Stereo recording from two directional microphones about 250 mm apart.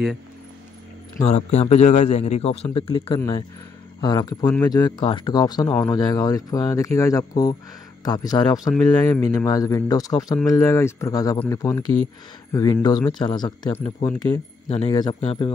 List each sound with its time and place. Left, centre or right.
1.2 s a man's voice: left